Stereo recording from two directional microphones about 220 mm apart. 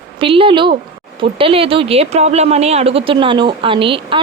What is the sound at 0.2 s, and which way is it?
Speech, 25° right (ahead or behind).